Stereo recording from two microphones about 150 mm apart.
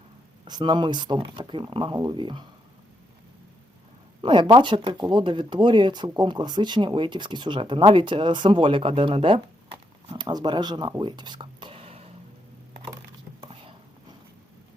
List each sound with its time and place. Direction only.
0.4 s speech: 30° right (ahead or behind)
4.2 s speech: 35° right (ahead or behind)
13.4 s chopping: 30° right (ahead or behind)